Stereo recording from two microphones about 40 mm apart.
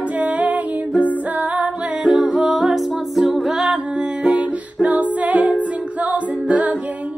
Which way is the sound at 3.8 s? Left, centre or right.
Right.